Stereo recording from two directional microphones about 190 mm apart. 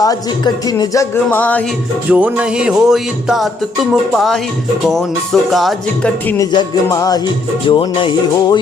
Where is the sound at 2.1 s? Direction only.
5° right (ahead or behind).